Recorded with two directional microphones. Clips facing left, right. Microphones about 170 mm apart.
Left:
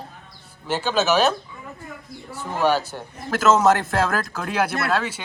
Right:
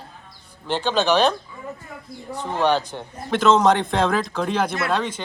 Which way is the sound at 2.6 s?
10° left (ahead or behind).